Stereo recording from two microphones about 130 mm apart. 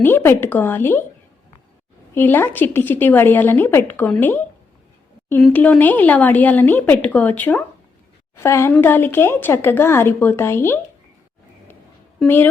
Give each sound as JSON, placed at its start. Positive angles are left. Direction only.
{"t": 0.0, "sound": "speech", "side_deg": 15}
{"t": 2.1, "sound": "speech", "side_deg": 15}